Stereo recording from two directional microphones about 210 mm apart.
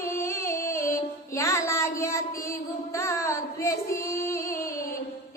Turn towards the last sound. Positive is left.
turn(degrees=15)  # may be behind; listen again after turning